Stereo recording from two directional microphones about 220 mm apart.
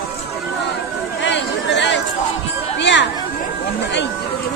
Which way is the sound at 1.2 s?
50° left (ahead or behind).